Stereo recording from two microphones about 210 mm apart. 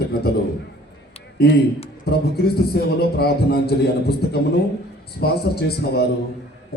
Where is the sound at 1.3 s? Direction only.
50° left (ahead or behind).